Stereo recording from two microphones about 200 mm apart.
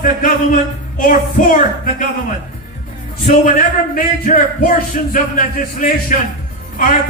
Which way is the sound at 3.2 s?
40° left (ahead or behind).